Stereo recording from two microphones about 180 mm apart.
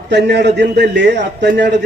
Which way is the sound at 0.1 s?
70° right (ahead or behind).